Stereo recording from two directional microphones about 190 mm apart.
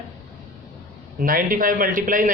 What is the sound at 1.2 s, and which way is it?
Speech, 45° right (ahead or behind).